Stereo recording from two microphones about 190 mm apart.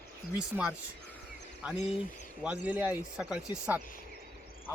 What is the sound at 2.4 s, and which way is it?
Speech, 5° right (ahead or behind).